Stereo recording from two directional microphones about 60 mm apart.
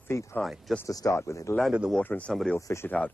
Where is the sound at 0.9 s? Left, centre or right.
Left.